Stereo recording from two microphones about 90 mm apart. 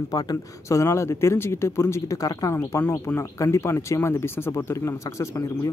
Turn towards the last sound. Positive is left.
turn(degrees=35)  # may be behind; listen again after turning